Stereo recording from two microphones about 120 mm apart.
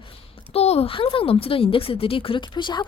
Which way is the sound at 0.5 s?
60° left (ahead or behind).